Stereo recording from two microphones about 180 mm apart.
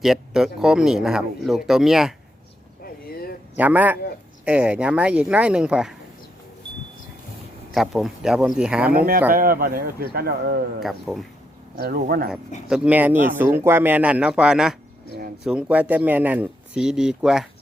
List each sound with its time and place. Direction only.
0.0 s speech: centre (ahead or behind)
2.8 s a sound: 55° left (ahead or behind)
3.6 s speech: 10° right (ahead or behind)
7.7 s speech: centre (ahead or behind)
8.9 s speech: 55° right (ahead or behind)
10.8 s speech: centre (ahead or behind)
11.8 s speech: 60° right (ahead or behind)
12.6 s speech: 5° right (ahead or behind)